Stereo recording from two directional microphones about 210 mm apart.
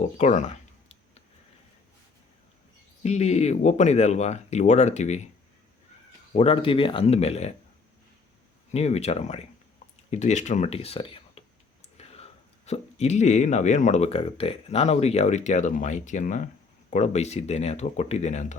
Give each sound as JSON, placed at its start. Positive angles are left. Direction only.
{"t": 0.2, "sound": "a sound", "side_deg": 35}
{"t": 3.0, "sound": "speech", "side_deg": 30}
{"t": 6.3, "sound": "speech", "side_deg": 25}
{"t": 8.7, "sound": "speech", "side_deg": 30}